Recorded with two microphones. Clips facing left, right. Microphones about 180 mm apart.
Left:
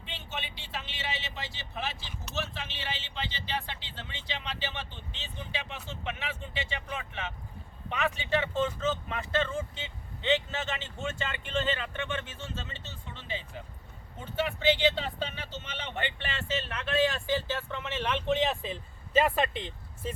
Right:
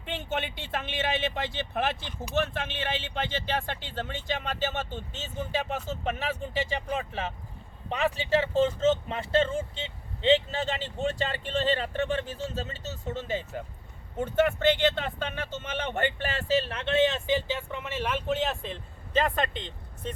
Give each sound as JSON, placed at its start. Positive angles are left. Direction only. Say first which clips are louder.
{"t": 0.0, "sound": "speech", "louder": "right 9 dB", "side_deg": -50}